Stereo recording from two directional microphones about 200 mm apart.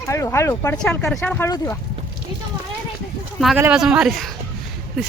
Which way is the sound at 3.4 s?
5° right (ahead or behind).